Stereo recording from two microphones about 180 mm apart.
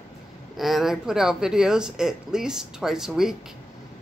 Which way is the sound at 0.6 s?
Centre (ahead or behind).